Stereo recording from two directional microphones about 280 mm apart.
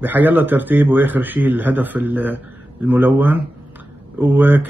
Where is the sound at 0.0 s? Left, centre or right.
Centre.